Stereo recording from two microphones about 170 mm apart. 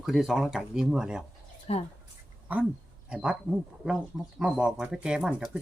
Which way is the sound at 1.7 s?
35° left (ahead or behind).